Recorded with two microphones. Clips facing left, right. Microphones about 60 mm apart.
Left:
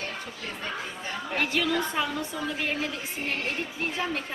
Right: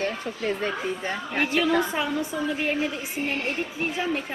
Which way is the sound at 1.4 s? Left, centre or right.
Centre.